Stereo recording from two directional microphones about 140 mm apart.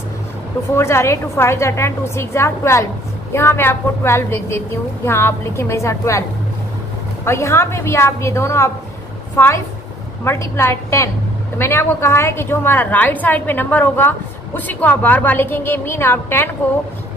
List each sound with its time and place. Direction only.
0.7 s a woman's voice: 20° left (ahead or behind)
7.2 s a woman's voice: 20° left (ahead or behind)